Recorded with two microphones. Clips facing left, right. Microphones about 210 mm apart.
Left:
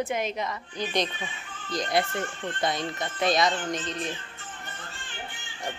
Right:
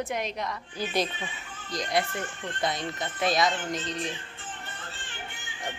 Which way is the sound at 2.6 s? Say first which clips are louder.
Left 1 dB; centre (ahead or behind).